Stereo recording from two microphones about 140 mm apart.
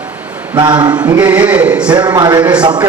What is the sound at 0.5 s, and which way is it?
Speech, 35° right (ahead or behind).